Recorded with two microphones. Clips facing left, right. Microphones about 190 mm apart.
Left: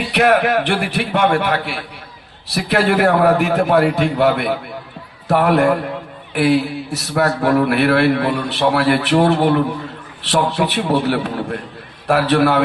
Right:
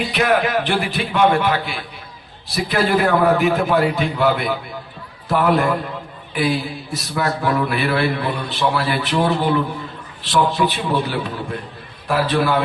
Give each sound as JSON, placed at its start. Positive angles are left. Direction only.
{"t": 0.1, "sound": "a man's voice", "side_deg": 65}